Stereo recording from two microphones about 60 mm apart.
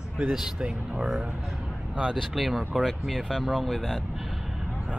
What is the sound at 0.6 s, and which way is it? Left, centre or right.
Speech, centre.